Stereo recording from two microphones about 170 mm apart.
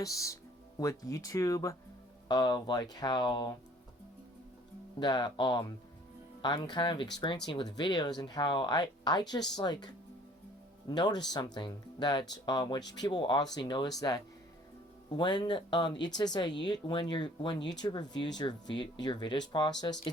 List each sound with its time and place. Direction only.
0.0 s speech: 20° left (ahead or behind)
4.9 s speech: 25° left (ahead or behind)